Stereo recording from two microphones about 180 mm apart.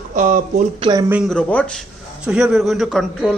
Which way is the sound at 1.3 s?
5° left (ahead or behind).